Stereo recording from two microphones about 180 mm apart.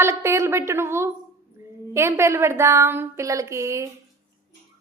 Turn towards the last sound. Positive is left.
turn(degrees=-15)  # may be behind; listen again after turning